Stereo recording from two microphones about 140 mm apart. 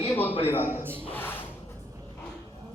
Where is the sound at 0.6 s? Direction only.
15° right (ahead or behind).